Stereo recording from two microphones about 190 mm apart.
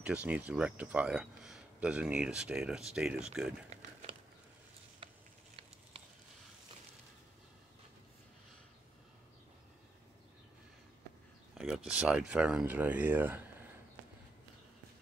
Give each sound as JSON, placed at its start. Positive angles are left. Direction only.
{"t": 0.0, "sound": "speech", "side_deg": -5}
{"t": 3.7, "sound": "a sound", "side_deg": -30}
{"t": 11.5, "sound": "speech", "side_deg": -5}